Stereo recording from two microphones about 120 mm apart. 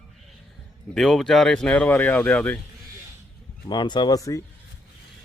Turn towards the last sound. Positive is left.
turn(degrees=30)  # may be behind; listen again after turning